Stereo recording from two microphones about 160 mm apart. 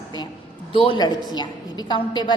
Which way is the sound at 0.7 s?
35° left (ahead or behind).